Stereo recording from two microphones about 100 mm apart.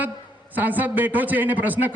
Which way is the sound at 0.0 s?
15° right (ahead or behind).